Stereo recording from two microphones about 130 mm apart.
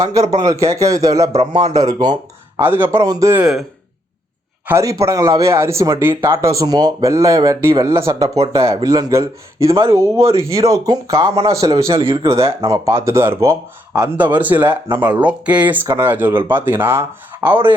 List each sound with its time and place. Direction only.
0.0 s speech: 25° right (ahead or behind)
2.6 s speech: 15° right (ahead or behind)
3.0 s speech: 25° right (ahead or behind)
4.6 s speech: 20° right (ahead or behind)
13.9 s speech: 10° right (ahead or behind)